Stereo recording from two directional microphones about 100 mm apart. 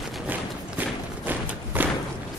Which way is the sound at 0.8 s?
15° right (ahead or behind).